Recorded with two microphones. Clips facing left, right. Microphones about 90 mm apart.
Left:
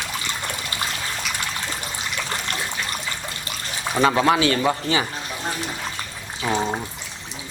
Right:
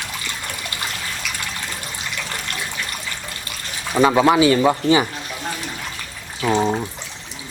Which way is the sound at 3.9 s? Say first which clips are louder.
Right 4 dB; 10° right (ahead or behind).